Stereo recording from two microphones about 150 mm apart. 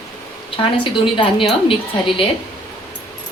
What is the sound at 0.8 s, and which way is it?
Speech, 35° left (ahead or behind).